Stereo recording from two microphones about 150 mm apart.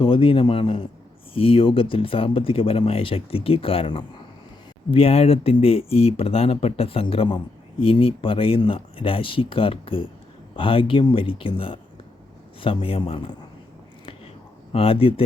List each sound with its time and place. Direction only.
0.0 s speech: 35° left (ahead or behind)
14.7 s speech: 40° left (ahead or behind)